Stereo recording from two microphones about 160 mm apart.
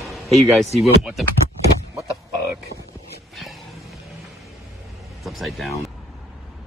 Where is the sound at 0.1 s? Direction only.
Centre (ahead or behind).